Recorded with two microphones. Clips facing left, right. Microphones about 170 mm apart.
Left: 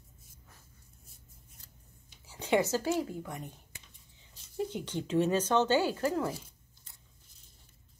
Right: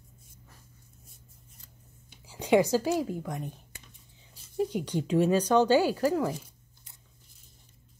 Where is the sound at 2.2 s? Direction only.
15° right (ahead or behind).